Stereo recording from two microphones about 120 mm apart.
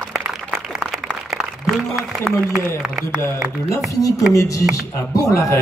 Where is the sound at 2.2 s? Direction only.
5° right (ahead or behind).